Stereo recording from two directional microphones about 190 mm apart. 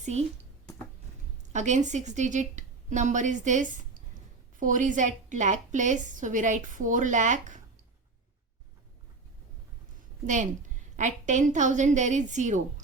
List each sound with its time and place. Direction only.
0.0 s speech: 35° right (ahead or behind)
1.5 s a woman's voice: 40° right (ahead or behind)
10.2 s a woman's voice: 40° right (ahead or behind)